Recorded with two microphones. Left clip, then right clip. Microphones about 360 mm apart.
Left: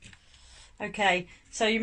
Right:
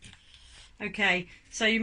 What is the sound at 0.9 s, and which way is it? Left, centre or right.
Speech, left.